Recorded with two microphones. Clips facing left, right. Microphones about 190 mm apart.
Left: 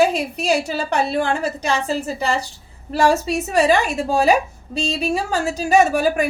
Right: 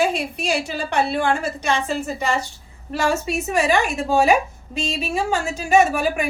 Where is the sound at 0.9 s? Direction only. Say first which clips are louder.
Even; 40° left (ahead or behind).